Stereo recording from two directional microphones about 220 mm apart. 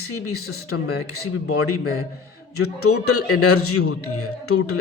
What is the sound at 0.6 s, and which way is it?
A man's voice, 80° left.